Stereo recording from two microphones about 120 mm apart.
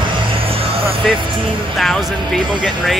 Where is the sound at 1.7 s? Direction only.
5° left (ahead or behind).